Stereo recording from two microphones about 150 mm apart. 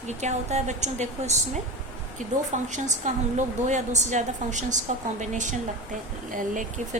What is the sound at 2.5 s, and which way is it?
A woman's voice, 50° right (ahead or behind).